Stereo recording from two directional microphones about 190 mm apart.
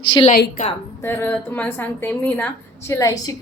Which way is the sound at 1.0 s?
10° left (ahead or behind).